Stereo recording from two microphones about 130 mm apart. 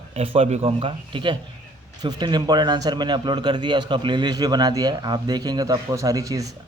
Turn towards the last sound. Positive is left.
turn(degrees=-25)  # may be behind; listen again after turning